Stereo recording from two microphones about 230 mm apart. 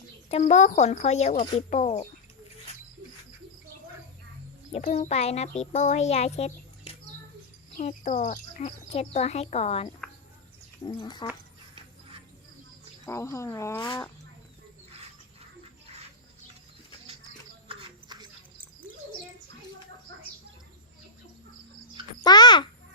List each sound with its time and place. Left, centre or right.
0.3 s a child's voice: left
4.7 s a child's voice: left
13.1 s speech: centre
17.7 s a sound: centre
22.2 s a child's voice: centre